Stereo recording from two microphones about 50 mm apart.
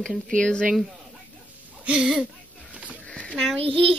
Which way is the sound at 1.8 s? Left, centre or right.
Right.